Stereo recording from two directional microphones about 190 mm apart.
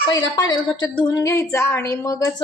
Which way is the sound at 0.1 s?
20° left (ahead or behind).